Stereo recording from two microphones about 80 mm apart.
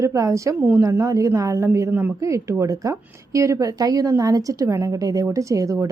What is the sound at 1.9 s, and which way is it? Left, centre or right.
Speech, right.